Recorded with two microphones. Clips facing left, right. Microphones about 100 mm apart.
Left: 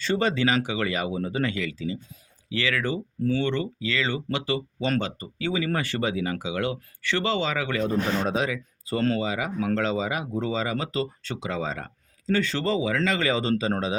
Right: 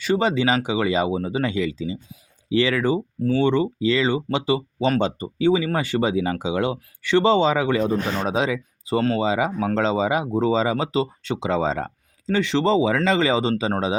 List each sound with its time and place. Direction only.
0.0 s speech: 15° right (ahead or behind)